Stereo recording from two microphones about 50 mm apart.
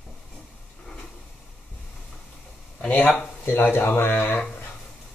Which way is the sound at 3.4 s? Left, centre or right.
Left.